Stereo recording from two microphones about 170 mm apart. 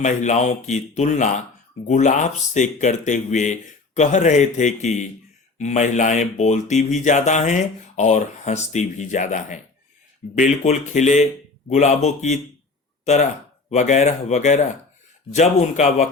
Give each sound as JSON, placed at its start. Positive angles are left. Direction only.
{"t": 0.0, "sound": "speech", "side_deg": 45}
{"t": 10.6, "sound": "speech", "side_deg": 40}
{"t": 13.7, "sound": "speech", "side_deg": 45}